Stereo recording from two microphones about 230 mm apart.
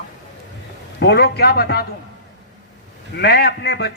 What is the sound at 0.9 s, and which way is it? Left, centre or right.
Speech, left.